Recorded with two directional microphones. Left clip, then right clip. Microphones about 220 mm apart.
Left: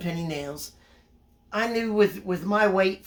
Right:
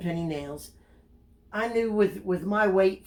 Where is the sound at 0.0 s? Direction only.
20° left (ahead or behind).